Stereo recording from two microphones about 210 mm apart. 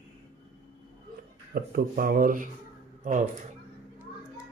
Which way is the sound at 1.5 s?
45° right (ahead or behind).